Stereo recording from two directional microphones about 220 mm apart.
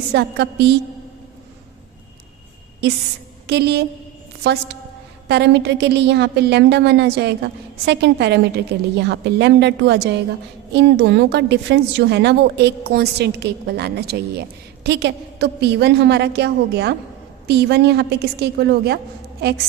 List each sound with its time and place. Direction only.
0.1 s a woman's voice: 50° right (ahead or behind)
3.4 s a woman's voice: 50° right (ahead or behind)
5.3 s a woman's voice: 50° right (ahead or behind)